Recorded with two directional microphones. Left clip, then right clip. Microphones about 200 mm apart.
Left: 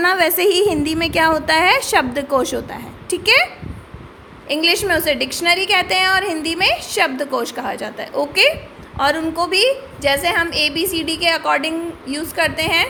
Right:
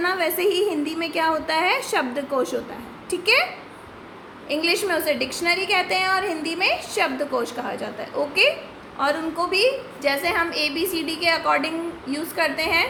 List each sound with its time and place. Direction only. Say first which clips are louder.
0.0 s a woman's voice: left 7 dB; 50° left (ahead or behind)
4.4 s a woman's voice: left 6 dB; 40° left (ahead or behind)